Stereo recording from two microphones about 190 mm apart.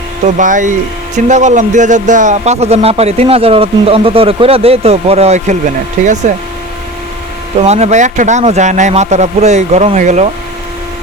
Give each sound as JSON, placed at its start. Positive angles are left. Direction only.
{"t": 0.3, "sound": "speech", "side_deg": -40}
{"t": 7.6, "sound": "speech", "side_deg": -35}